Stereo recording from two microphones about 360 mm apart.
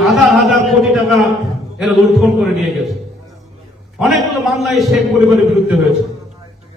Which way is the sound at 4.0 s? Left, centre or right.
Centre.